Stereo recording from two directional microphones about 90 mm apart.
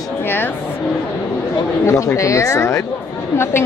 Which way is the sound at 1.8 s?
35° left (ahead or behind).